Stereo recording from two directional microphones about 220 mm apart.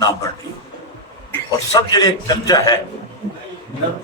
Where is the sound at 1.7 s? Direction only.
15° left (ahead or behind).